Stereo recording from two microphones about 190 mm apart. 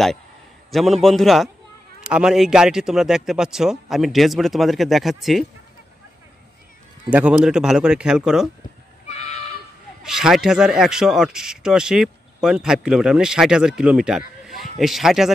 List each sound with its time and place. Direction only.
0.7 s speech: centre (ahead or behind)
7.1 s speech: 5° right (ahead or behind)
9.1 s a sound: 35° left (ahead or behind)
10.0 s speech: 5° right (ahead or behind)